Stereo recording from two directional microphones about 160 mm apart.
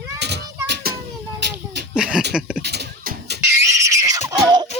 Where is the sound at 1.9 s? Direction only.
5° right (ahead or behind).